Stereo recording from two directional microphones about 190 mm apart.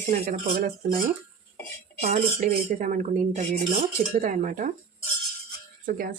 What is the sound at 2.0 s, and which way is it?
Speech, 40° right (ahead or behind).